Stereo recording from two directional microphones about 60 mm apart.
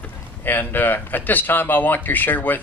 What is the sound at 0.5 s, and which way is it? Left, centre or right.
Speech, left.